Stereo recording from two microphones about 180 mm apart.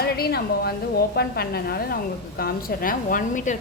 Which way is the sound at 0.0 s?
60° left (ahead or behind).